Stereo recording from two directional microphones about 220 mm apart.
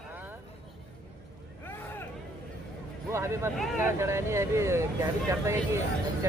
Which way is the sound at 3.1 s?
10° right (ahead or behind).